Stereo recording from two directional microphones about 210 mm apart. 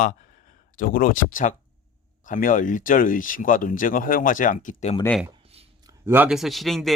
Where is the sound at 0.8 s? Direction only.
40° left (ahead or behind).